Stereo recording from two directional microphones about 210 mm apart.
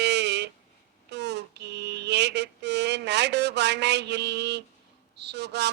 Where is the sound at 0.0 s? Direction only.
55° right (ahead or behind).